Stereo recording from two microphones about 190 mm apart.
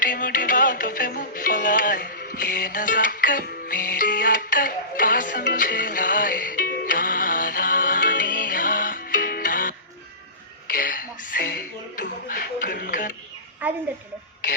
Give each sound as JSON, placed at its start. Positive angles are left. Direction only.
{"t": 0.0, "sound": "music", "side_deg": 45}
{"t": 10.7, "sound": "speech", "side_deg": 45}
{"t": 13.6, "sound": "a woman's voice", "side_deg": -10}